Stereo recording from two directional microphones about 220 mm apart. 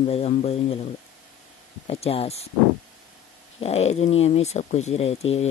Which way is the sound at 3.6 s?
30° left (ahead or behind).